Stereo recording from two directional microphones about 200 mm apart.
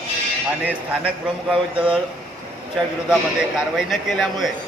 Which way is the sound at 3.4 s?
5° right (ahead or behind).